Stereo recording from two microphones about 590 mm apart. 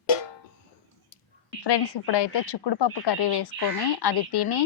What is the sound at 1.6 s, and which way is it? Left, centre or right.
A woman's voice, left.